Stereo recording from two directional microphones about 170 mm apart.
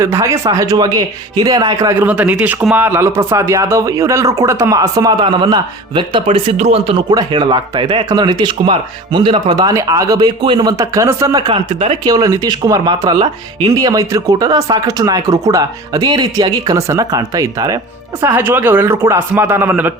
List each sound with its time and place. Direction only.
0.0 s speech: 15° right (ahead or behind)
2.0 s speech: 10° right (ahead or behind); by 6.9 s 40° right (ahead or behind)
7.1 s speech: 25° right (ahead or behind)
12.0 s a man's voice: 20° right (ahead or behind)